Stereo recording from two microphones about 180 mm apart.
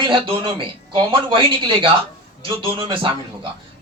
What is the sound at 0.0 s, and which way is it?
Speech, 30° right (ahead or behind).